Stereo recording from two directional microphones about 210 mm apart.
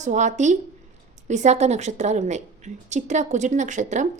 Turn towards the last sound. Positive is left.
turn(degrees=-35)  # may be behind; listen again after turning